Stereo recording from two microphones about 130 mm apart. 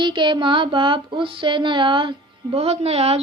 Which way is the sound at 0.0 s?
35° right (ahead or behind).